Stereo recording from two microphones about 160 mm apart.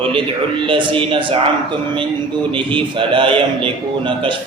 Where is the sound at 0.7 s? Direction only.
30° right (ahead or behind).